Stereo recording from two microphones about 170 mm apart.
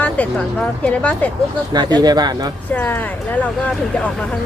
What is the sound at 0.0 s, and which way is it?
A woman's voice, 10° left (ahead or behind).